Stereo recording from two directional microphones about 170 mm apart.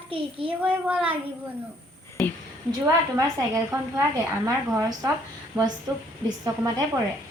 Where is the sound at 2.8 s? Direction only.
20° right (ahead or behind).